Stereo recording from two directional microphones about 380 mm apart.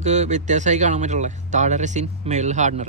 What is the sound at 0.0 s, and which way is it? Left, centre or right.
Speech, centre.